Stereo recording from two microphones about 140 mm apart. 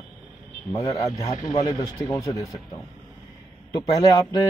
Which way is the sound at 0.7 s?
25° left (ahead or behind).